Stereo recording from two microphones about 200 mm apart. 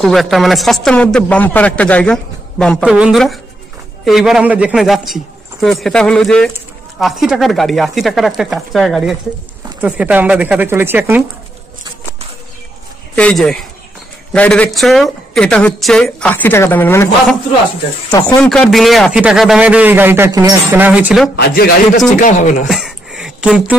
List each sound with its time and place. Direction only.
0.0 s a man's voice: centre (ahead or behind)
13.1 s a man's voice: 5° left (ahead or behind)
18.4 s a man's voice: 5° left (ahead or behind)
21.4 s a man's voice: 50° left (ahead or behind)
22.2 s speech: 40° left (ahead or behind)
22.7 s a sound: centre (ahead or behind)